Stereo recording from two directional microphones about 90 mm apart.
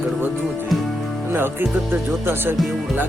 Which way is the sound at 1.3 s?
25° right (ahead or behind).